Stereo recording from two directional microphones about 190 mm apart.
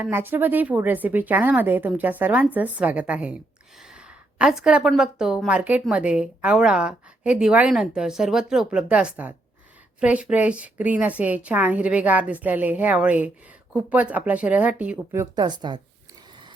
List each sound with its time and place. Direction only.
0.0 s a woman's voice: 10° right (ahead or behind)